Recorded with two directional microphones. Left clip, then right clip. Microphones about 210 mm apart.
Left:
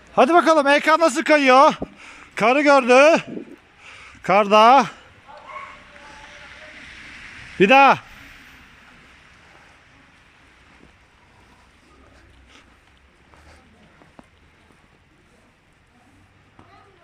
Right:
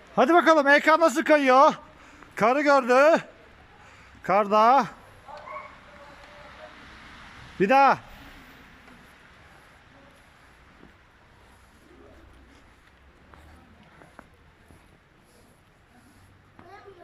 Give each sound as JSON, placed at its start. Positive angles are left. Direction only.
{"t": 0.1, "sound": "a man's voice", "side_deg": 0}
{"t": 5.3, "sound": "a sound", "side_deg": -25}
{"t": 7.6, "sound": "speech", "side_deg": 0}